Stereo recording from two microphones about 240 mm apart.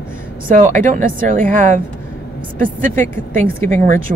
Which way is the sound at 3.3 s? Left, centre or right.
Right.